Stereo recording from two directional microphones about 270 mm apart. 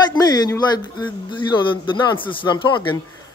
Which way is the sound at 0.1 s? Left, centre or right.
Centre.